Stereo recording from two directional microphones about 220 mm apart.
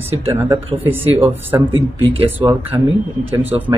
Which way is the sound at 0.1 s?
25° right (ahead or behind).